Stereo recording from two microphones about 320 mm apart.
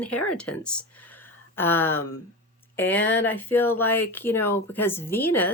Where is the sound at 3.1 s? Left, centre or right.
Centre.